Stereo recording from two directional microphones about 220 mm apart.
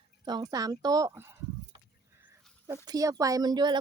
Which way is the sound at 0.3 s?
20° right (ahead or behind).